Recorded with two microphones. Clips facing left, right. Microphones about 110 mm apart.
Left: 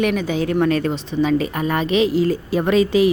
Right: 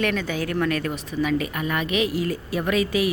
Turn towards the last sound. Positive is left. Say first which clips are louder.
# left 7 dB
turn(degrees=30)  # may be behind; listen again after turning